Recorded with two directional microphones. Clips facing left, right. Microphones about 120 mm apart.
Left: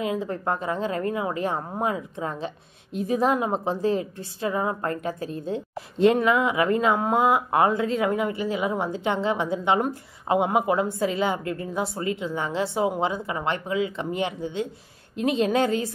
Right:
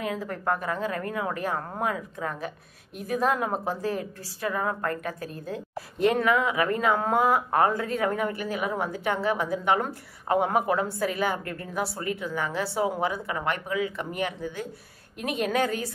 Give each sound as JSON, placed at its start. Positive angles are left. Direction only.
{"t": 0.0, "sound": "a woman's voice", "side_deg": 20}